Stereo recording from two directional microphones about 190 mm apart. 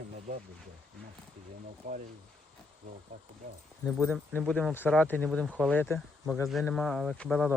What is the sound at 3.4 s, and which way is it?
Speech, 45° right (ahead or behind).